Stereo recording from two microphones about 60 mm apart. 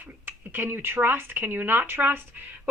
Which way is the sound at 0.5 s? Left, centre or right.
Right.